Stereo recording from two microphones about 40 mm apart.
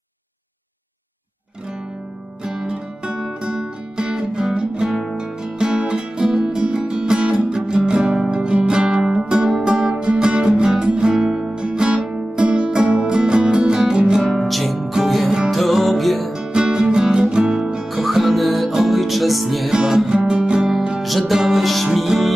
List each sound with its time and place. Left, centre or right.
2.4 s music: right
14.2 s music: centre
14.9 s music: centre
15.5 s music: centre
16.3 s music: centre
17.7 s music: centre
20.1 s music: right; by 22.3 s centre